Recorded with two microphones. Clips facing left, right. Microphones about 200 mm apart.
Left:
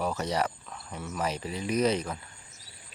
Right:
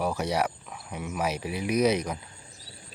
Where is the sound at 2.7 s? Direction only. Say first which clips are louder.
Right 8 dB; 30° right (ahead or behind).